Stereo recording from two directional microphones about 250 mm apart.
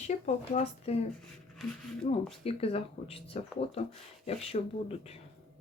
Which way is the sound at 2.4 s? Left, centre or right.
Left.